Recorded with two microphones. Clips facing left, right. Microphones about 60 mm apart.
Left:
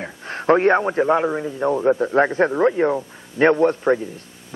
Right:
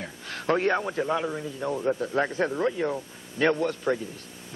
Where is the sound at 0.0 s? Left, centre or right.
Left.